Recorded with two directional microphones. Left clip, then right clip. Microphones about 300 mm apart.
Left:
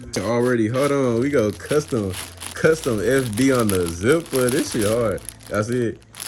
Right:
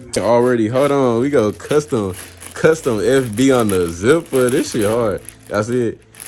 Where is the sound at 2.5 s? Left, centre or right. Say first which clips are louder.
Right 4 dB; centre.